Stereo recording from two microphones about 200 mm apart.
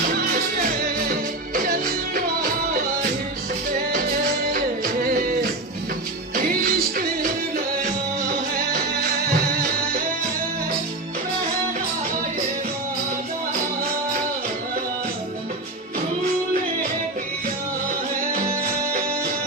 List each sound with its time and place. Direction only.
0.2 s music: 45° right (ahead or behind)
4.5 s music: 45° right (ahead or behind)